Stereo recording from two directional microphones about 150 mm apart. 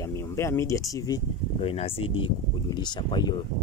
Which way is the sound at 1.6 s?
40° left (ahead or behind).